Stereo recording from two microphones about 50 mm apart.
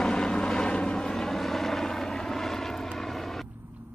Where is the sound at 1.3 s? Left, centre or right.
Centre.